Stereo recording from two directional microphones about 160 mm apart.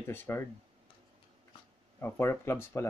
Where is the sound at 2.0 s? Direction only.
15° left (ahead or behind).